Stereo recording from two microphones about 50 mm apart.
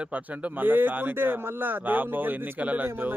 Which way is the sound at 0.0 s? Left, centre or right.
Right.